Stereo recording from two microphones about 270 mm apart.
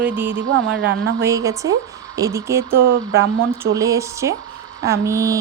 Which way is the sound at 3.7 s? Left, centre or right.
Centre.